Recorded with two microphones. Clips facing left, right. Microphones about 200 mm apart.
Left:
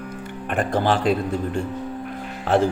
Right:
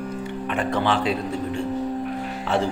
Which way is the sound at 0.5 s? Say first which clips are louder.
Left 2 dB; 50° left (ahead or behind).